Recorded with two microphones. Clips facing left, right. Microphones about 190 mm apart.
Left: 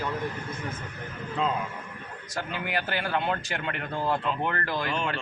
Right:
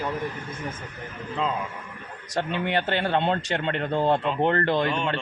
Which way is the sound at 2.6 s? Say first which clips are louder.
Right 5 dB; 25° right (ahead or behind).